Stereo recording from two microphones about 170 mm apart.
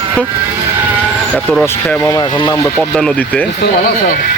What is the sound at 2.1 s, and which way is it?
Speech, 30° left (ahead or behind).